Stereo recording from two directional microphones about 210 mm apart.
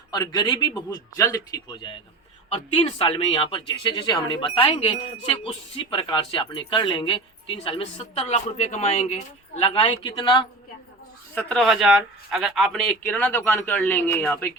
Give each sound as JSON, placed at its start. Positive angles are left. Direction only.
{"t": 0.1, "sound": "a man's voice", "side_deg": 20}
{"t": 11.3, "sound": "speech", "side_deg": 5}